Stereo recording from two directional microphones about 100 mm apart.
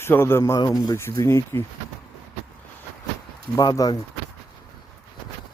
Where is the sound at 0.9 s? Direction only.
30° left (ahead or behind).